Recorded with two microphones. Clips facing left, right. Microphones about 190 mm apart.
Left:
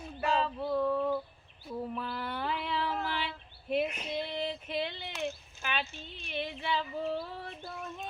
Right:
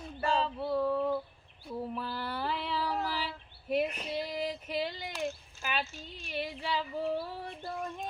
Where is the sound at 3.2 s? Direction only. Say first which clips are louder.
Even; 40° right (ahead or behind).